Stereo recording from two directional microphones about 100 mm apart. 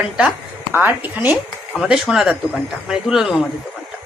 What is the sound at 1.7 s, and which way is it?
Speech, centre (ahead or behind).